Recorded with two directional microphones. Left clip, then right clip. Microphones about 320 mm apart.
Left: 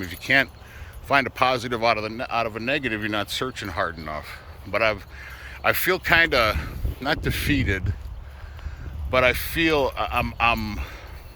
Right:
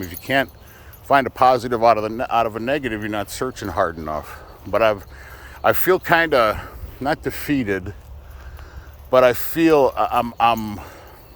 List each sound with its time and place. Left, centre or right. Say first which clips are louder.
0.0 s speech: even; centre
9.0 s speech: right 6 dB; right